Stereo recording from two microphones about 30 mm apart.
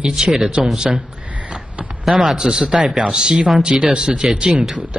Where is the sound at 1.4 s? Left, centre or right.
Right.